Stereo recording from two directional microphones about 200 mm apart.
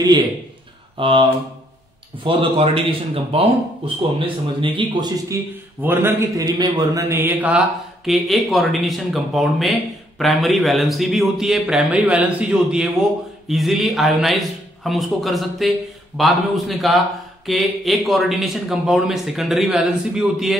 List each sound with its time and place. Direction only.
0.9 s speech: 25° right (ahead or behind)
2.2 s speech: 30° right (ahead or behind)
5.8 s speech: 10° right (ahead or behind)